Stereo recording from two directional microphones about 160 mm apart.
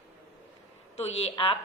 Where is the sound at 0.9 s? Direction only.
40° left (ahead or behind).